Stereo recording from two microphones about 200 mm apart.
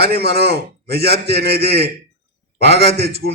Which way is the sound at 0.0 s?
50° right (ahead or behind).